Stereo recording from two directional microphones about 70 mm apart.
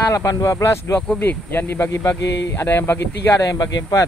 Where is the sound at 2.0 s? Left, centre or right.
Left.